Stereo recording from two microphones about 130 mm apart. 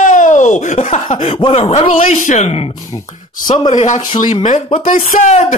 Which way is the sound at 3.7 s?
70° left (ahead or behind).